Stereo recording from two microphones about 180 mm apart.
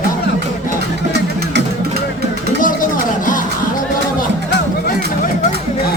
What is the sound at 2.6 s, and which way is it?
Music, 50° left (ahead or behind).